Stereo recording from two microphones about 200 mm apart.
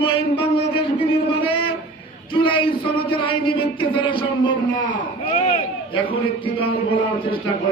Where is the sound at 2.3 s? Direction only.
25° left (ahead or behind).